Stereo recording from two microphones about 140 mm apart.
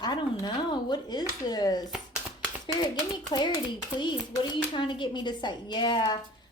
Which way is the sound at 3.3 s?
40° left (ahead or behind).